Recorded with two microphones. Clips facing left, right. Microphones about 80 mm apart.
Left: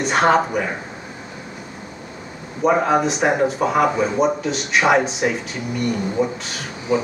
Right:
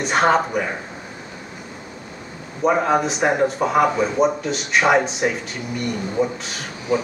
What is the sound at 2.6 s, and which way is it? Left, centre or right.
Speech, centre.